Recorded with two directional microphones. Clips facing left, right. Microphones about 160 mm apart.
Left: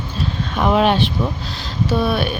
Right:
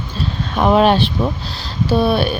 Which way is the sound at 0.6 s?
40° right (ahead or behind).